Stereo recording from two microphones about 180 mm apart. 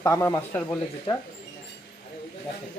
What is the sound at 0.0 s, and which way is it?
Speech, 15° left (ahead or behind).